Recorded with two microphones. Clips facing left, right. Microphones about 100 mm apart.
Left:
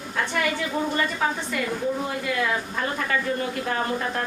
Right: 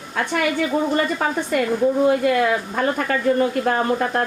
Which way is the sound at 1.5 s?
55° right (ahead or behind).